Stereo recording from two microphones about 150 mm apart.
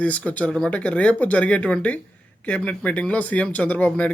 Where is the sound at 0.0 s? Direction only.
10° left (ahead or behind).